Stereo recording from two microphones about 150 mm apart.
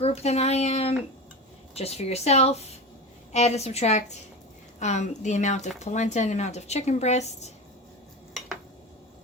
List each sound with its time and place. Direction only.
0.0 s speech: 45° left (ahead or behind)